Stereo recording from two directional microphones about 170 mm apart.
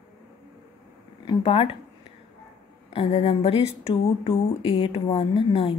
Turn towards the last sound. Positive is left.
turn(degrees=30)  # may be behind; listen again after turning